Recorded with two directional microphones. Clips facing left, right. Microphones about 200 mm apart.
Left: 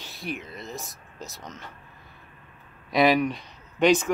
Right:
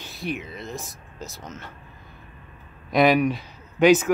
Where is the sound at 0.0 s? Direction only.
Centre (ahead or behind).